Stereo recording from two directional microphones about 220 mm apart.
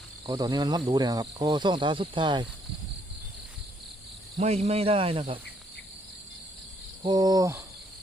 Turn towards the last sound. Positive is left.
turn(degrees=-15)  # may be behind; listen again after turning